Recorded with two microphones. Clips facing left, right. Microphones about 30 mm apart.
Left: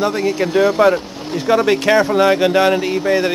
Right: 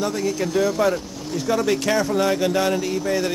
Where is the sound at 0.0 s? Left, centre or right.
Left.